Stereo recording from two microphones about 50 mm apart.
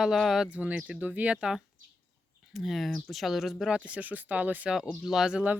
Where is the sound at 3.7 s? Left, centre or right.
Right.